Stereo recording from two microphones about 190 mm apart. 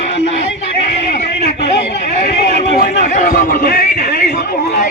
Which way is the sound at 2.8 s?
45° left (ahead or behind).